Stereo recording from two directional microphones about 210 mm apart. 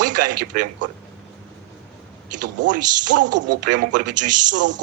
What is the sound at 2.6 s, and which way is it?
A man's voice, 40° right (ahead or behind).